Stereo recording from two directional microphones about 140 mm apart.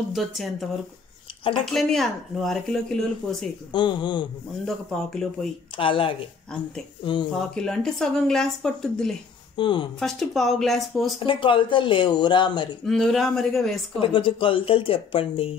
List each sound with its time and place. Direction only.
0.1 s speech: centre (ahead or behind)
1.7 s speech: 5° left (ahead or behind)
3.7 s speech: 35° left (ahead or behind)
4.6 s speech: 5° left (ahead or behind)
5.8 s speech: 40° left (ahead or behind)
6.5 s speech: 5° left (ahead or behind)
9.6 s speech: 35° left (ahead or behind)
9.9 s speech: centre (ahead or behind)
11.1 s speech: 35° left (ahead or behind)
12.8 s speech: 5° left (ahead or behind)
13.9 s speech: 40° left (ahead or behind)